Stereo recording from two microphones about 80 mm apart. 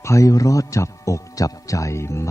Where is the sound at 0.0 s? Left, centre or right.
Left.